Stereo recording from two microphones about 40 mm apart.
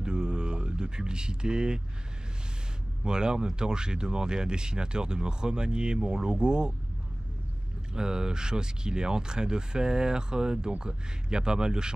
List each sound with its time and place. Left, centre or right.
0.0 s a sound: right
3.0 s speech: centre
7.9 s speech: centre